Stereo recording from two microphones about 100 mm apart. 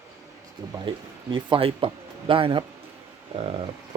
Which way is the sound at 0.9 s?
55° right (ahead or behind).